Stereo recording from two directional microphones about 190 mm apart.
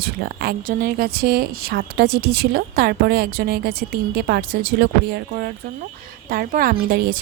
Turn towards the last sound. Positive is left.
turn(degrees=-55)  # may be behind; listen again after turning